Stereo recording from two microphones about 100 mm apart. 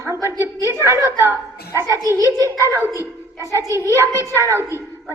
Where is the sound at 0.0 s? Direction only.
30° right (ahead or behind).